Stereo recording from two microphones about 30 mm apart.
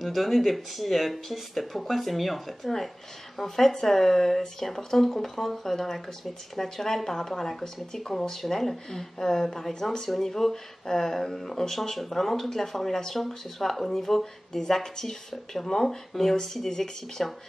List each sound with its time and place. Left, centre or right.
0.0 s speech: centre
3.3 s speech: centre